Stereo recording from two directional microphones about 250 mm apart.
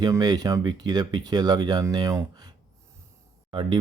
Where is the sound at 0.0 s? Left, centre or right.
Centre.